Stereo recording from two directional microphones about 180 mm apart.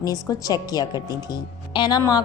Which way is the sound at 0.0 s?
20° left (ahead or behind).